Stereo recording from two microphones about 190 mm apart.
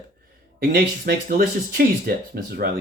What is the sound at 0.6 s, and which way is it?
Speech, 50° right (ahead or behind).